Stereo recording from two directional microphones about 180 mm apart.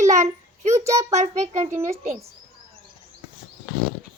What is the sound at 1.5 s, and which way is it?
Speech, 40° right (ahead or behind).